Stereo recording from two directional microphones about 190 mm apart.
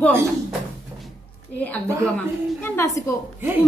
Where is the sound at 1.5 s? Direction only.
10° left (ahead or behind).